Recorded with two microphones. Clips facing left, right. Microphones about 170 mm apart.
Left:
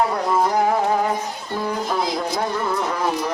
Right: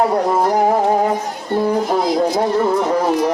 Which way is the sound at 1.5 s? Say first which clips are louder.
Right 7 dB; 45° right (ahead or behind).